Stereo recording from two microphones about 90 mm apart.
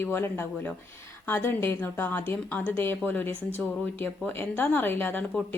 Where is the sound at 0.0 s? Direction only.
25° left (ahead or behind).